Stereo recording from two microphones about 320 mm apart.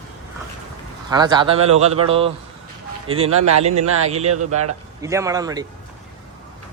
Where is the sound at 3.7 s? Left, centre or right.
Right.